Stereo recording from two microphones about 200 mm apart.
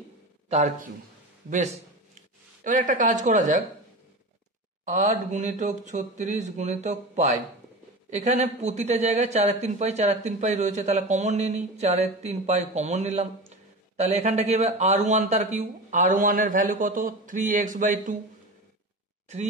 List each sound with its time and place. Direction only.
0.5 s speech: 35° right (ahead or behind)
2.1 s speech: 40° right (ahead or behind)
4.8 s speech: 35° right (ahead or behind)